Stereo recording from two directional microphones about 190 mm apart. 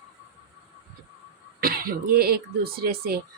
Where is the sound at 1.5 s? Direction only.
50° right (ahead or behind).